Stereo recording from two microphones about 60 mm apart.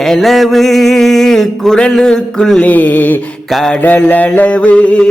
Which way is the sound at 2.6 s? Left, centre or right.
Left.